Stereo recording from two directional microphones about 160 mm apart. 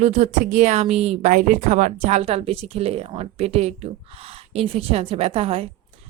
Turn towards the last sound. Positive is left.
turn(degrees=-40)  # may be behind; listen again after turning